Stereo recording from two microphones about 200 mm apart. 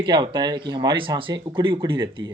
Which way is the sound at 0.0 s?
25° right (ahead or behind).